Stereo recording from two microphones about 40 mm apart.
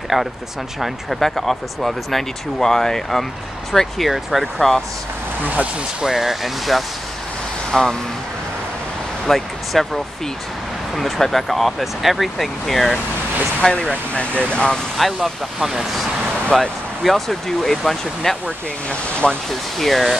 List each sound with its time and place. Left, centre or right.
0.1 s speech: centre
1.2 s speech: centre
4.6 s speech: centre
5.4 s speech: right
5.9 s speech: centre
7.7 s speech: centre
9.3 s speech: centre
11.0 s speech: centre
13.6 s speech: left
15.0 s speech: centre
15.6 s speech: centre
16.5 s speech: centre
19.2 s speech: left
19.8 s speech: centre